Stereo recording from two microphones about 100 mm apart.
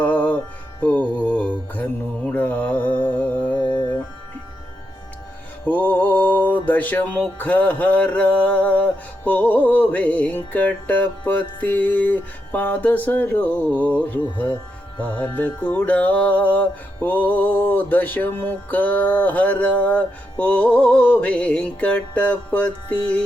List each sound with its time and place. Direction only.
0.0 s music: 15° left (ahead or behind)
5.6 s music: 15° left (ahead or behind)